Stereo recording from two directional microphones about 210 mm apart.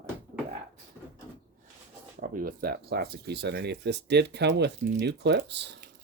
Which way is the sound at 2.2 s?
40° right (ahead or behind).